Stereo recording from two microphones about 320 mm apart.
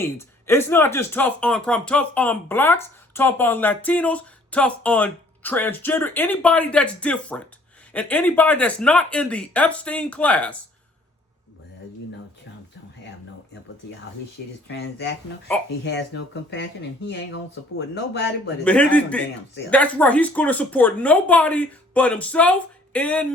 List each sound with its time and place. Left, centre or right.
0.0 s speech: centre
14.7 s speech: left
18.6 s speech: centre